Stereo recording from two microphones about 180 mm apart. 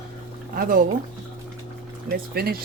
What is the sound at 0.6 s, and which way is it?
Speech, 50° right (ahead or behind).